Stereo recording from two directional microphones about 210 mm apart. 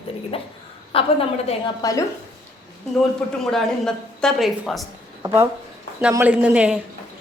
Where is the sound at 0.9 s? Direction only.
25° left (ahead or behind).